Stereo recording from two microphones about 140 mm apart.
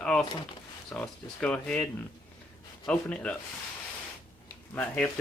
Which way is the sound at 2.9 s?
10° left (ahead or behind).